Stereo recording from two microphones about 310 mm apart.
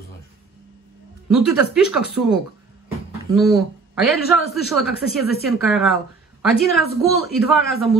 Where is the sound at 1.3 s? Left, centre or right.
Centre.